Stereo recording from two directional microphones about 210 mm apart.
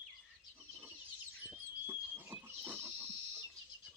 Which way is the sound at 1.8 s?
10° right (ahead or behind).